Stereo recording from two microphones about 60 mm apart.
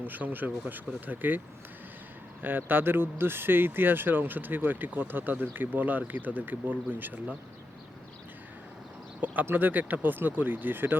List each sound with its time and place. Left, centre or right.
0.0 s speech: right
2.4 s speech: right
9.2 s speech: right